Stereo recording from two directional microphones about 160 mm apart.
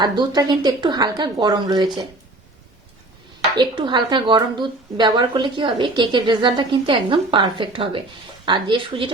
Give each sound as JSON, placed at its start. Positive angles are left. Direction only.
{"t": 0.0, "sound": "speech", "side_deg": -25}
{"t": 3.5, "sound": "a woman's voice", "side_deg": -30}